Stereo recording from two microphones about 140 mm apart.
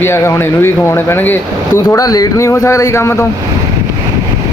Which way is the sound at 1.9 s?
25° left (ahead or behind).